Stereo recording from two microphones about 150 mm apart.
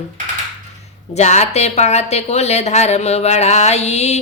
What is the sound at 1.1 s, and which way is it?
A woman's voice, 50° left (ahead or behind).